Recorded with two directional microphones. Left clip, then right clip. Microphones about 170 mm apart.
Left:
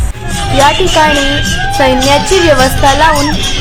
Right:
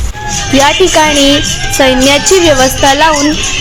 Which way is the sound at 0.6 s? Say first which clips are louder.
Even; 40° right (ahead or behind).